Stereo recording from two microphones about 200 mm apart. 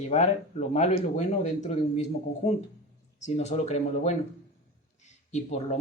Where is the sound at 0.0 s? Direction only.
35° left (ahead or behind).